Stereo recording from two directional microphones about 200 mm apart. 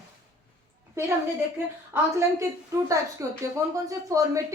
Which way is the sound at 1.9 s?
15° right (ahead or behind).